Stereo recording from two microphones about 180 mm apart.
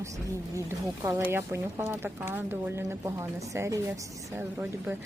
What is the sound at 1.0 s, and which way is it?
Speech, 15° right (ahead or behind).